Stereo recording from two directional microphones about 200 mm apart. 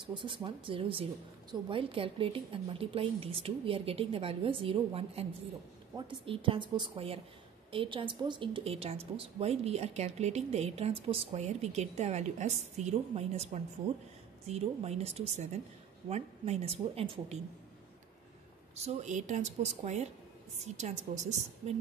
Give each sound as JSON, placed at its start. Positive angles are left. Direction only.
{"t": 0.0, "sound": "a woman's voice", "side_deg": -25}
{"t": 18.9, "sound": "a woman's voice", "side_deg": -35}